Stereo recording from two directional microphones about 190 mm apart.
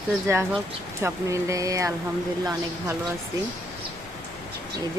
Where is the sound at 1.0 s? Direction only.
15° right (ahead or behind).